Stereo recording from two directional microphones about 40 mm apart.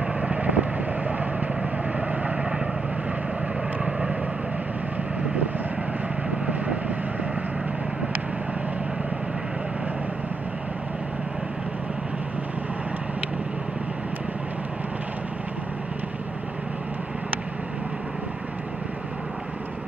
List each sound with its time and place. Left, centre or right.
0.2 s vehicle: right
3.8 s vehicle: right